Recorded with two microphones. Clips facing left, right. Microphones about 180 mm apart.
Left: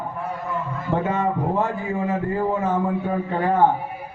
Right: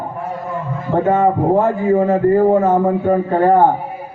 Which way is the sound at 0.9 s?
45° right (ahead or behind).